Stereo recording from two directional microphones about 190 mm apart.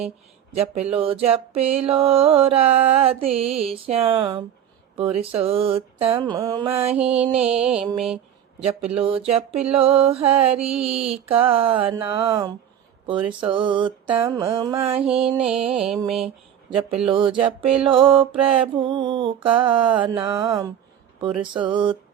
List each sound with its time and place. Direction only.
0.5 s a sound: 35° right (ahead or behind)
3.7 s mantra: 30° right (ahead or behind)
6.9 s music: 5° right (ahead or behind)
7.3 s mantra: 5° right (ahead or behind)
8.6 s a sound: 30° right (ahead or behind)
10.8 s mantra: 30° right (ahead or behind)
14.9 s mantra: 5° right (ahead or behind)
15.3 s mantra: 30° right (ahead or behind)
15.6 s mantra: 5° right (ahead or behind)
16.6 s mantra: 30° right (ahead or behind)